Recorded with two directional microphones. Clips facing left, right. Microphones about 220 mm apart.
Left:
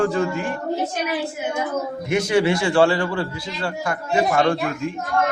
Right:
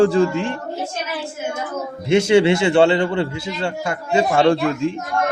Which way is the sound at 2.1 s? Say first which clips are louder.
Right 5 dB; 25° right (ahead or behind).